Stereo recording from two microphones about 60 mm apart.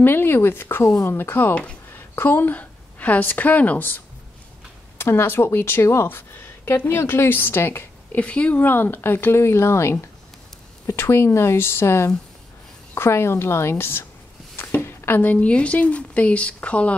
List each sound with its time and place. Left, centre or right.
0.0 s speech: left
1.5 s speech: left
1.9 s a woman's voice: left
4.9 s speech: left
8.2 s speech: left
8.6 s speech: left
14.6 s a sound: left
15.2 s speech: left